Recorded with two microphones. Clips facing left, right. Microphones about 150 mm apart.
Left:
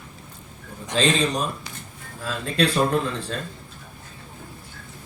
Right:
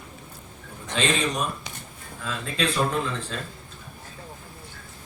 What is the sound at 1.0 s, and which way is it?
Speech, 35° left (ahead or behind).